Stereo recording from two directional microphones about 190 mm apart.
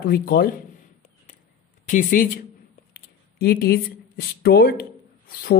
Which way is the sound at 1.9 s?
45° left (ahead or behind).